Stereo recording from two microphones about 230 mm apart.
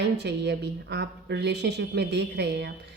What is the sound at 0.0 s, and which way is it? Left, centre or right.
A woman's voice, right.